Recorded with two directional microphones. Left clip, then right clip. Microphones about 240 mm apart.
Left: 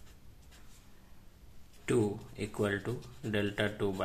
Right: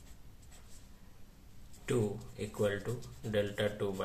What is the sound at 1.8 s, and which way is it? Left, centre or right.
Speech, left.